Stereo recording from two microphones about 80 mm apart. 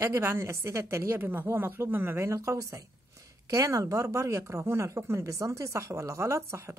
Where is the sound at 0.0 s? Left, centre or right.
Right.